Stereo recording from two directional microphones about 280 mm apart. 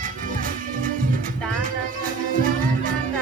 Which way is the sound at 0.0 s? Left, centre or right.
Right.